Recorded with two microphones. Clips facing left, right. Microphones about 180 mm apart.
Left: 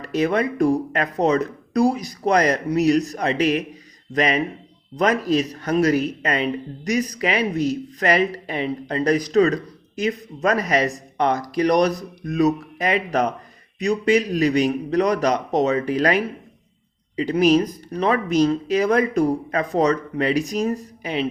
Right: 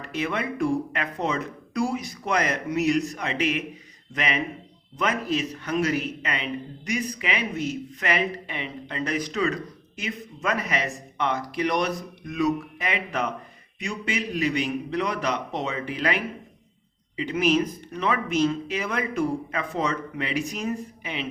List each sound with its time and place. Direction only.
0.0 s a man's voice: 40° left (ahead or behind)